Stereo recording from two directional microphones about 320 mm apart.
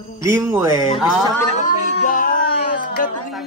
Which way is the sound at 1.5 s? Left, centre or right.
Left.